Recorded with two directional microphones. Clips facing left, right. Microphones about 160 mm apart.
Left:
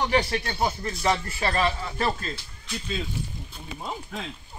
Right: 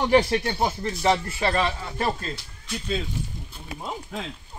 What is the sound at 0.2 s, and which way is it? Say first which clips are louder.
Speech: right 3 dB; 15° right (ahead or behind).